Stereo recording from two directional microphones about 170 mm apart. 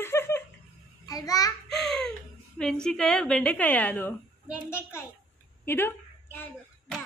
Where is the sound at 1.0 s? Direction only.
20° left (ahead or behind).